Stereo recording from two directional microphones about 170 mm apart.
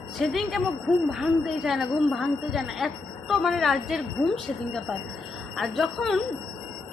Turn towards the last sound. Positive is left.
turn(degrees=0)  # may be behind; listen again after turning